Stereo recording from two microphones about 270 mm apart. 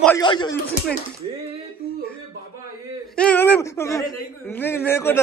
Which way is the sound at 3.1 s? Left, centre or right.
Centre.